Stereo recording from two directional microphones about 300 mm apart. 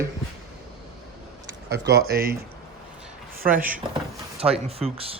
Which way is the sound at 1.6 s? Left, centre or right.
Right.